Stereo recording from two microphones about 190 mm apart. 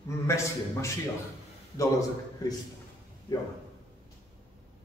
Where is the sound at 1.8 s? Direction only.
15° left (ahead or behind).